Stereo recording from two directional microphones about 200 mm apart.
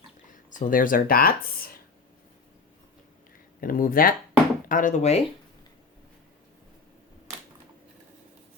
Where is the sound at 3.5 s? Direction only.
45° left (ahead or behind).